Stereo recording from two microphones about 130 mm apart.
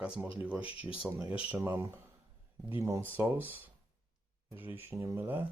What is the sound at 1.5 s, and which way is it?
Speech, 20° right (ahead or behind).